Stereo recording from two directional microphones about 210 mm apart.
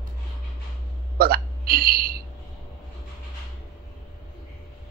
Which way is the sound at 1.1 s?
45° right (ahead or behind).